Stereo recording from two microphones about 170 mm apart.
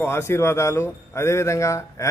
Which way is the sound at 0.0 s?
15° left (ahead or behind).